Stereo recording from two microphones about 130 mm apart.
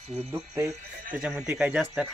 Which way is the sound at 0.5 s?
20° right (ahead or behind).